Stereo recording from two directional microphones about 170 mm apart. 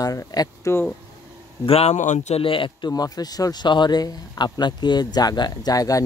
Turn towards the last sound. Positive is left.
turn(degrees=20)  # may be behind; listen again after turning